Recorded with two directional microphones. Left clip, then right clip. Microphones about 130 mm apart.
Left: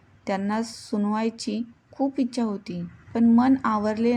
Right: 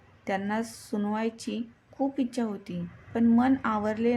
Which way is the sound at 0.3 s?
25° left (ahead or behind).